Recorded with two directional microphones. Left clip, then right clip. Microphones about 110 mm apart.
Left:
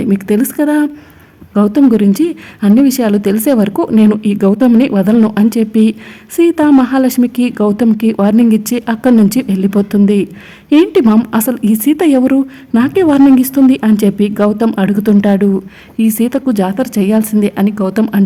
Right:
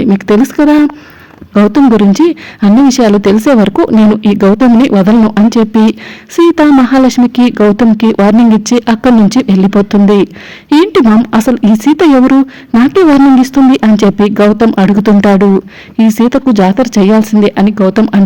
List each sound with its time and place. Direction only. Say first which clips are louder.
0.0 s speech: right 5 dB; 30° right (ahead or behind)
11.3 s speech: right 5 dB; 25° right (ahead or behind)